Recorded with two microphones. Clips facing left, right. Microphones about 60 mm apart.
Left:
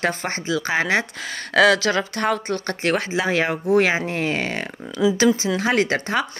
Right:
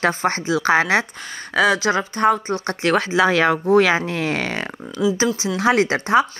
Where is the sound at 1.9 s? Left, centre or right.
Right.